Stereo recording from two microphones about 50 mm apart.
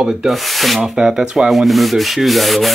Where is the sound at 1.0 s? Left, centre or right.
Centre.